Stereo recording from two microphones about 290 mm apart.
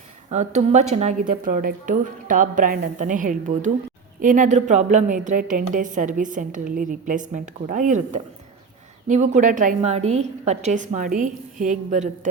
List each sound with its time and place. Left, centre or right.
0.3 s a woman's voice: right